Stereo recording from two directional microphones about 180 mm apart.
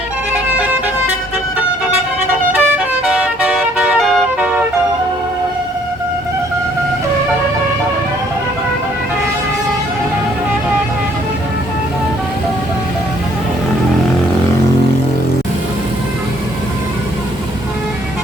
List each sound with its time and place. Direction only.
2.5 s vehicle: 5° right (ahead or behind)